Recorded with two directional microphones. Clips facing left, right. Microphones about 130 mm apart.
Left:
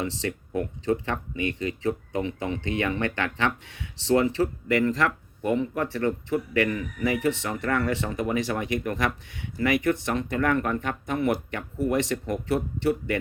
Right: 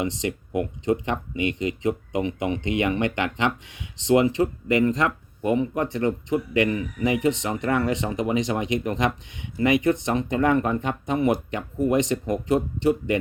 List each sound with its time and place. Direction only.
0.0 s speech: 15° right (ahead or behind)